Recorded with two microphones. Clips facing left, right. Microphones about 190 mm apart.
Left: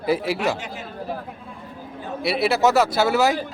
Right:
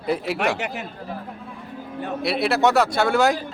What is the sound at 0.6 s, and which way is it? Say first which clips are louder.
Speech: right 5 dB; 70° right (ahead or behind).